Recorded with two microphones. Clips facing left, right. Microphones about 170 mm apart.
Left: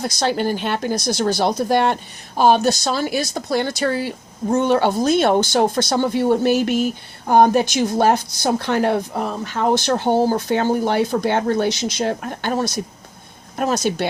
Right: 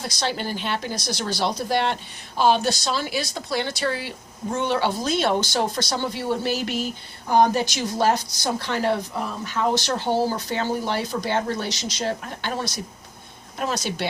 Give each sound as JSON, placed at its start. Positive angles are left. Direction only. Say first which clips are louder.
{"t": 0.0, "sound": "speech", "louder": "left 7 dB", "side_deg": 45}